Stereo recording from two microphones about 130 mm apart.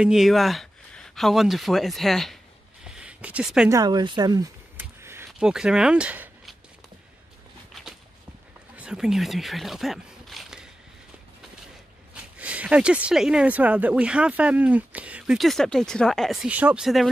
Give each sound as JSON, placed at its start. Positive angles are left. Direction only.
{"t": 0.0, "sound": "speech", "side_deg": -5}
{"t": 2.8, "sound": "a sound", "side_deg": -5}
{"t": 3.6, "sound": "speech", "side_deg": -30}
{"t": 4.7, "sound": "a sound", "side_deg": -20}
{"t": 5.4, "sound": "speech", "side_deg": -5}
{"t": 8.7, "sound": "speech", "side_deg": -5}
{"t": 12.1, "sound": "speech", "side_deg": -10}